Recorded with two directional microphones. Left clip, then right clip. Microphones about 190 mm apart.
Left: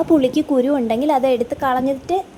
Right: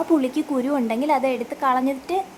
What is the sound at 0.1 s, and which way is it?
A woman's voice, 20° left (ahead or behind).